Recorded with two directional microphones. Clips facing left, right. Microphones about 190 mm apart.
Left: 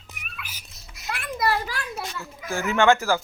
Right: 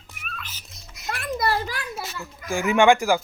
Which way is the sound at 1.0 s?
45° right (ahead or behind).